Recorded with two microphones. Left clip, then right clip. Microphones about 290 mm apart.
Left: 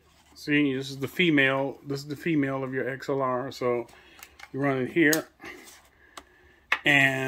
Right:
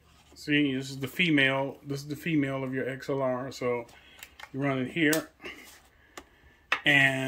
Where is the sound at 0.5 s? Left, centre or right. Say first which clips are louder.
Left 2 dB; left.